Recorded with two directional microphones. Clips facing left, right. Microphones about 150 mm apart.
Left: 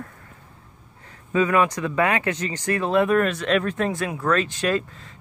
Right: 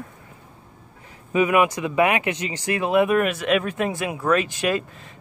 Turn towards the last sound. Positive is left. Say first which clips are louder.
# even
turn(degrees=-15)  # may be behind; listen again after turning